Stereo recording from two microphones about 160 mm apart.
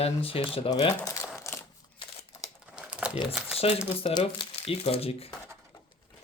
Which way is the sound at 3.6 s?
40° left (ahead or behind).